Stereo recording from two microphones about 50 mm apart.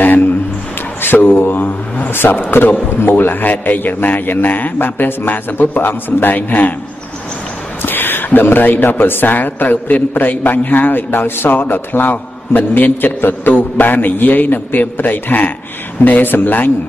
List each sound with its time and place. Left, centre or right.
1.0 s a man's voice: left
7.8 s a man's voice: left